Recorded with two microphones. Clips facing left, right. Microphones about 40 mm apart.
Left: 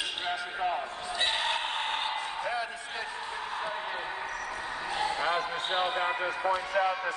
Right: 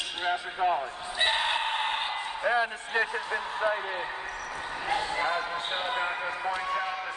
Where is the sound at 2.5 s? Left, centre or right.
Right.